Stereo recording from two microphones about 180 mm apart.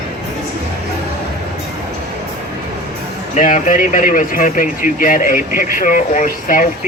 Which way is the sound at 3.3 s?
45° left (ahead or behind).